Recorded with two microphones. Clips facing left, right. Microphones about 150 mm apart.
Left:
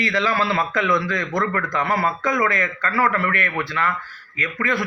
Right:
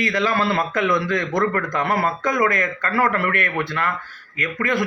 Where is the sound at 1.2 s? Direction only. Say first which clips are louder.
Right 2 dB; 20° right (ahead or behind).